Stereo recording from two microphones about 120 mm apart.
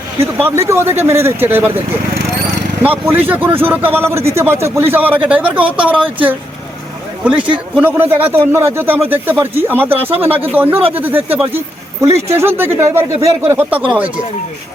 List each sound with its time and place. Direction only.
0.3 s a man's voice: 15° right (ahead or behind)
2.8 s a man's voice: 15° right (ahead or behind)
7.3 s a man's voice: 10° right (ahead or behind)